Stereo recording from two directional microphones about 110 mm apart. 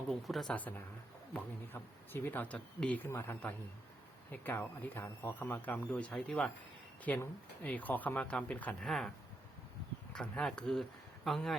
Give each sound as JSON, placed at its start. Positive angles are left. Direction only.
{"t": 0.1, "sound": "speech", "side_deg": 0}
{"t": 1.3, "sound": "speech", "side_deg": 15}
{"t": 10.1, "sound": "speech", "side_deg": 5}